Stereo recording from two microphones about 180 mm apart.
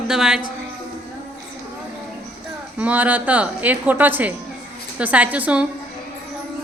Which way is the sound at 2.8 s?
10° right (ahead or behind).